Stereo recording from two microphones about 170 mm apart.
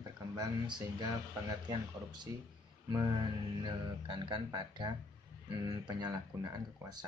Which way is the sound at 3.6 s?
25° right (ahead or behind).